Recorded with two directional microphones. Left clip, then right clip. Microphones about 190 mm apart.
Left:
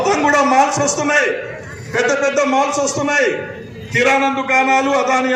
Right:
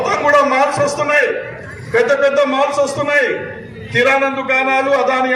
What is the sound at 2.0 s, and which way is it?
A man's voice, 40° right (ahead or behind).